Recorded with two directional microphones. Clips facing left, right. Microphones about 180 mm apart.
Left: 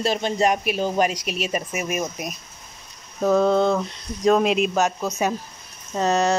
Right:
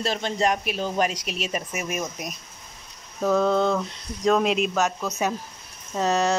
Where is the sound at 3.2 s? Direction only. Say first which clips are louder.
Left 3 dB; 20° left (ahead or behind).